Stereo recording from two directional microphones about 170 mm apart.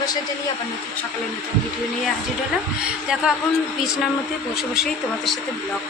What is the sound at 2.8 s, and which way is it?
Speech, 5° right (ahead or behind).